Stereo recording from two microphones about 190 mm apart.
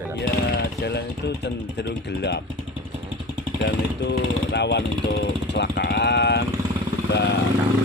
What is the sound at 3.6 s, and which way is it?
Speech, 65° left (ahead or behind).